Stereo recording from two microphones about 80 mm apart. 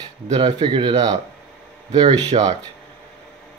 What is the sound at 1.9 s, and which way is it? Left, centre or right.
Speech, right.